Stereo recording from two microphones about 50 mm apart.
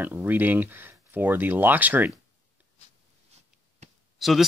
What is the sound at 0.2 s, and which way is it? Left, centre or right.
Speech, right.